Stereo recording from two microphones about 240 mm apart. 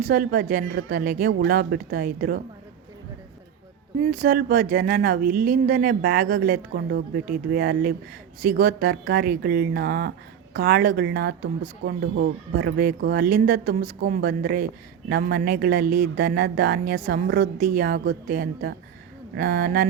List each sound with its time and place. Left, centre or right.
0.0 s speech: right
4.0 s speech: right